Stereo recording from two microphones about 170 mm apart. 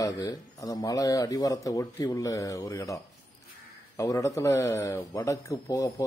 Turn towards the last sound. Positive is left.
turn(degrees=20)  # may be behind; listen again after turning